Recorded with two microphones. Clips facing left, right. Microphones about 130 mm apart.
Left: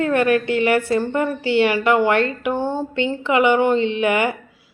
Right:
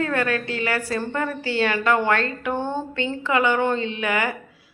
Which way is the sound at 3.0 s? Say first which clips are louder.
Left 5 dB; 20° left (ahead or behind).